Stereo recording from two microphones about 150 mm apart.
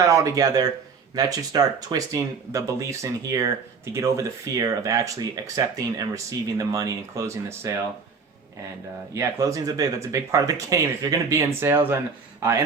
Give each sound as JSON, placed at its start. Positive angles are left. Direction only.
{"t": 0.0, "sound": "speech", "side_deg": -20}
{"t": 9.1, "sound": "speech", "side_deg": -20}